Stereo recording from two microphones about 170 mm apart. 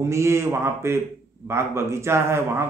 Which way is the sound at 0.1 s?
15° right (ahead or behind).